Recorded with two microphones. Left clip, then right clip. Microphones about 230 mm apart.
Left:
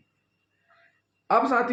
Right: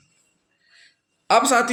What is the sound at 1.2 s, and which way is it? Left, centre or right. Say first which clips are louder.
Speech: right 5 dB; right.